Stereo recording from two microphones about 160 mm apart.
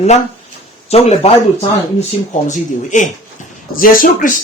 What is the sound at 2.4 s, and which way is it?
Speech, 50° left (ahead or behind).